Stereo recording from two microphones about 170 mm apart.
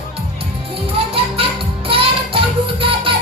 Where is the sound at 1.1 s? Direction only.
35° right (ahead or behind).